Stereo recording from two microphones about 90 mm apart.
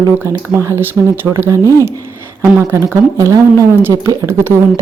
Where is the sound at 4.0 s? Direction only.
35° right (ahead or behind).